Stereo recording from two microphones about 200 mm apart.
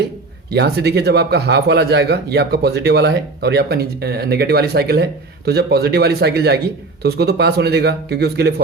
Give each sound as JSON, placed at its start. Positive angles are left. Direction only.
{"t": 0.5, "sound": "speech", "side_deg": -55}